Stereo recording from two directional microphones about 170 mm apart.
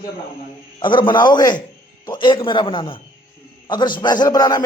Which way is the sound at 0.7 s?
30° left (ahead or behind).